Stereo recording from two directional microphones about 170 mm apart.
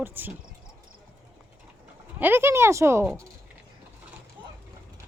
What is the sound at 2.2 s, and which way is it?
Speech, 10° right (ahead or behind).